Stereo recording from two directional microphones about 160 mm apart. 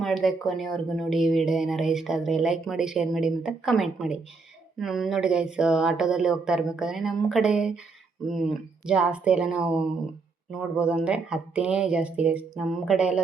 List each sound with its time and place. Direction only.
0.0 s speech: centre (ahead or behind)